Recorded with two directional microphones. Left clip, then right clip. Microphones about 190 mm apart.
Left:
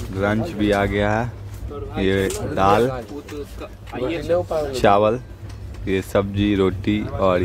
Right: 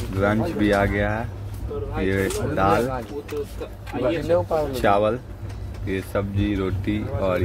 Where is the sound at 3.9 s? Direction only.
55° left (ahead or behind).